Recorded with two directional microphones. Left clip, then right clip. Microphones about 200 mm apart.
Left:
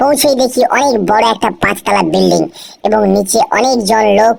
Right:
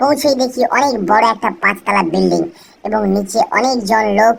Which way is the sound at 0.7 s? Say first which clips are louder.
Left 3 dB; 30° left (ahead or behind).